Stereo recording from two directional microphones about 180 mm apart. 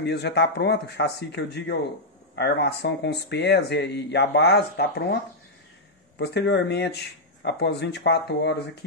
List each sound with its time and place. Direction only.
0.0 s speech: 70° left (ahead or behind)
6.1 s speech: 70° left (ahead or behind)